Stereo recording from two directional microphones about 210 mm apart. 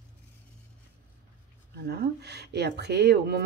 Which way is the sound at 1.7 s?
50° right (ahead or behind).